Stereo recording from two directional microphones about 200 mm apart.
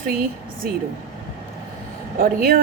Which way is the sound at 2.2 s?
45° right (ahead or behind).